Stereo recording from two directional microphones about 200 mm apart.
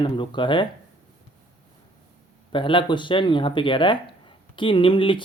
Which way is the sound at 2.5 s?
25° left (ahead or behind).